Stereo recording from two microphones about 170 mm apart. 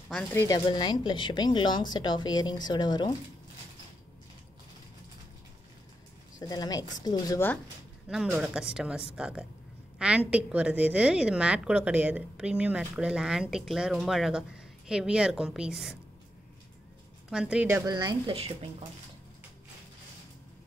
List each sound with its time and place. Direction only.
0.3 s speech: 15° left (ahead or behind)
6.4 s speech: 25° left (ahead or behind)
8.1 s a woman's voice: 5° right (ahead or behind)
17.3 s speech: 5° right (ahead or behind); by 18.9 s 35° right (ahead or behind)